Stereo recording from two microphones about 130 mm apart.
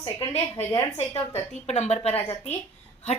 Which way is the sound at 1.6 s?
60° left (ahead or behind).